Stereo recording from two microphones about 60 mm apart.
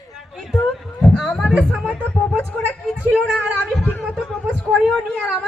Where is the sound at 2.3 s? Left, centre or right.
Centre.